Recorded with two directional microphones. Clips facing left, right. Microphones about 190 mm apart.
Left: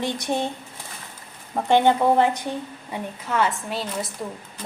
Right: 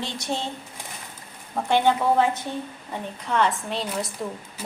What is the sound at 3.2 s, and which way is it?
Speech, 5° left (ahead or behind).